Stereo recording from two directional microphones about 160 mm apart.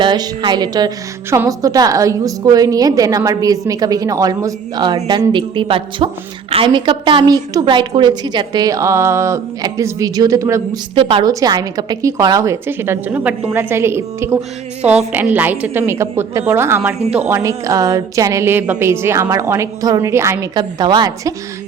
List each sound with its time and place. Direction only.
0.0 s a woman's voice: 30° right (ahead or behind)
10.9 s speech: 35° right (ahead or behind)
11.3 s a woman's voice: 25° right (ahead or behind)